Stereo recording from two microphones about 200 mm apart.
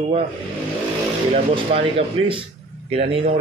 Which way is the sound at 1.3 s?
30° right (ahead or behind).